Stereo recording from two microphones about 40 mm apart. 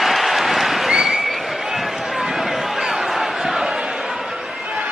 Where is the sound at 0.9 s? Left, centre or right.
Centre.